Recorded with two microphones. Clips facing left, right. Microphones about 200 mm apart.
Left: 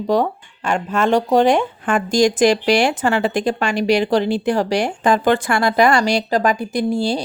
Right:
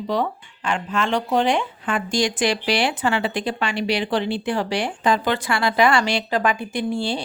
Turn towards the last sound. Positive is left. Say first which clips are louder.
# left 5 dB
turn(degrees=40)  # may be behind; listen again after turning